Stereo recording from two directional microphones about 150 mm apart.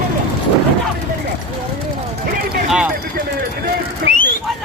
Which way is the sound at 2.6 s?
5° right (ahead or behind).